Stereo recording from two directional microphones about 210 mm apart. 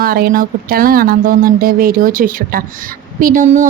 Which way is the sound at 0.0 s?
45° right (ahead or behind).